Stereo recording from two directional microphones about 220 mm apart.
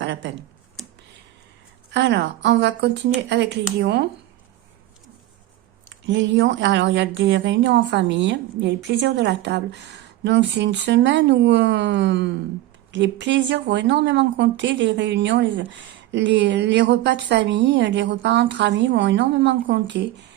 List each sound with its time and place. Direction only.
0.0 s a sound: 55° right (ahead or behind)
1.9 s speech: 50° right (ahead or behind)
5.9 s speech: 55° right (ahead or behind)